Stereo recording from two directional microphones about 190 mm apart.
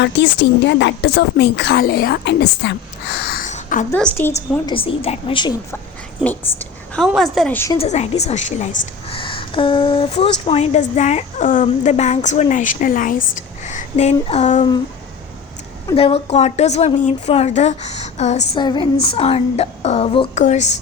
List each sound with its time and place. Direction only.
0.0 s speech: 70° left (ahead or behind)
3.2 s a sound: 45° left (ahead or behind)
3.9 s a woman's voice: 5° left (ahead or behind)
4.6 s a woman's voice: 30° left (ahead or behind)
6.2 s a woman's voice: 5° left (ahead or behind)
7.7 s a woman's voice: 35° left (ahead or behind)
16.0 s a woman's voice: 30° left (ahead or behind)
18.6 s a woman's voice: 25° left (ahead or behind)